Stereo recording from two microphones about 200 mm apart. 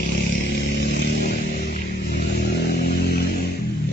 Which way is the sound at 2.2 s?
55° left (ahead or behind).